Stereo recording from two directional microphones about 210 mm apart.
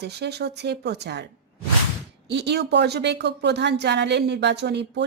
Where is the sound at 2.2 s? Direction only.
55° right (ahead or behind).